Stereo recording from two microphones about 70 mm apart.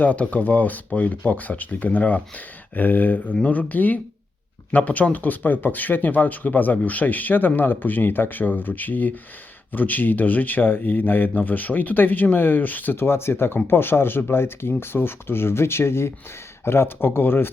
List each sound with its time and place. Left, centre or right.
0.0 s speech: left